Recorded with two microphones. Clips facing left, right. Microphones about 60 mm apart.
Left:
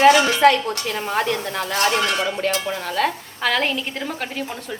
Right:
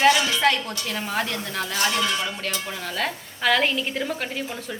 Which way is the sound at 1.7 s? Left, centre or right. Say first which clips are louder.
Left 4 dB; left.